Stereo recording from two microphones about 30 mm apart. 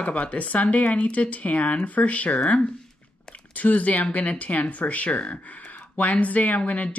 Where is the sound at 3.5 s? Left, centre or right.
Left.